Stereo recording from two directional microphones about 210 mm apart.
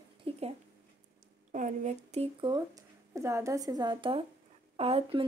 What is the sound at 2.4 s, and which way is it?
Speech, 20° right (ahead or behind).